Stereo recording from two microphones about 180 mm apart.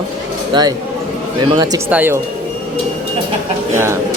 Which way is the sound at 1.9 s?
10° right (ahead or behind).